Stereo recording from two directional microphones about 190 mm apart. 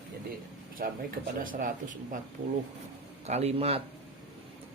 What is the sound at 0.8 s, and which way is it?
Speech, 50° right (ahead or behind).